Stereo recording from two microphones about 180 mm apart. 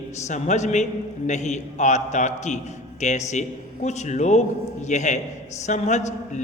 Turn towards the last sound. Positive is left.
turn(degrees=40)  # may be behind; listen again after turning